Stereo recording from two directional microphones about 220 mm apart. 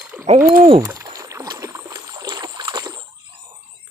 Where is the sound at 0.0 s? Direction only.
5° right (ahead or behind).